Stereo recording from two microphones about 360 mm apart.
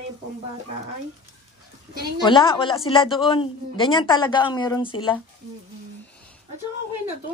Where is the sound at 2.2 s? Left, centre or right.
Centre.